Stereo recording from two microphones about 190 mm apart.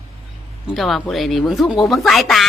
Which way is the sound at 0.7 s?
Centre (ahead or behind).